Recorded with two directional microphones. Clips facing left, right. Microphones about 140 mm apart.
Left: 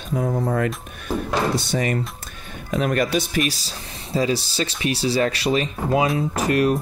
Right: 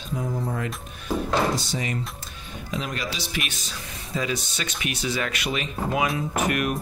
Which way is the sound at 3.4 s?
35° left (ahead or behind).